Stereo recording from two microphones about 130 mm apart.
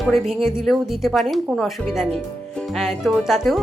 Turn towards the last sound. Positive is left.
turn(degrees=0)  # may be behind; listen again after turning